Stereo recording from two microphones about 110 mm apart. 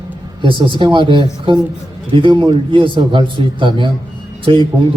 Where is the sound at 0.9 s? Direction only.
50° right (ahead or behind).